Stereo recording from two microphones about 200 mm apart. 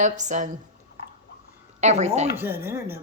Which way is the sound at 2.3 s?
10° right (ahead or behind).